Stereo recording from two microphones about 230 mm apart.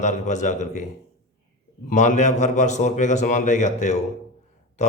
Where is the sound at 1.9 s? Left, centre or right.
Left.